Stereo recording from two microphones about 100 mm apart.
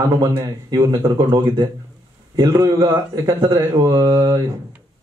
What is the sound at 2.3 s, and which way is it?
Speech, 40° right (ahead or behind).